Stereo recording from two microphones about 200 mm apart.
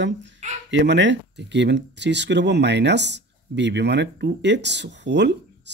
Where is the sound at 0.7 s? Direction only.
65° right (ahead or behind).